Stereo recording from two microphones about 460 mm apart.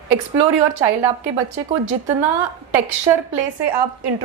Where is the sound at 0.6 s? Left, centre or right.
Right.